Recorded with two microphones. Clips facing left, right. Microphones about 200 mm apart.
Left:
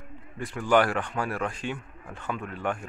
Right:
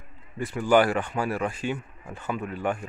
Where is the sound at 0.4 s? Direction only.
5° right (ahead or behind).